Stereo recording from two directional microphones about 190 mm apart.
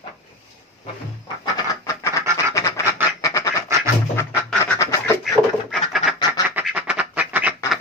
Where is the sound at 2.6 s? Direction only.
15° left (ahead or behind).